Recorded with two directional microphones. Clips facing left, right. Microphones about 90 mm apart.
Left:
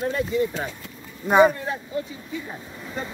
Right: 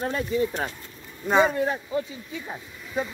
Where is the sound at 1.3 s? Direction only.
10° left (ahead or behind).